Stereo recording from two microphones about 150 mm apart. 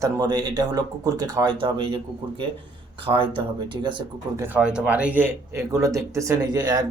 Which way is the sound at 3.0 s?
35° right (ahead or behind).